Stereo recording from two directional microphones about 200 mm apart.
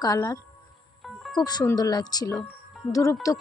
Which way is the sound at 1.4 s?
20° left (ahead or behind).